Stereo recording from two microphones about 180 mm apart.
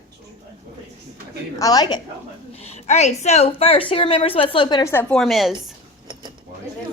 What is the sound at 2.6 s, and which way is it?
A woman's voice, 35° left (ahead or behind).